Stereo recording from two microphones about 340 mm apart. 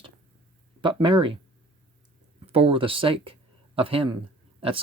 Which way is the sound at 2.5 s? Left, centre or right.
Centre.